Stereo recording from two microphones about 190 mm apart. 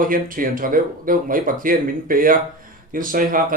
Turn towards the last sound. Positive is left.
turn(degrees=-45)  # may be behind; listen again after turning